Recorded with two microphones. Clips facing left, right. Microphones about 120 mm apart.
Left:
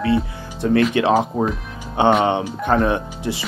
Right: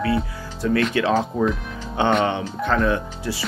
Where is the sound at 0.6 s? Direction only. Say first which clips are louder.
Left 3 dB; 35° left (ahead or behind).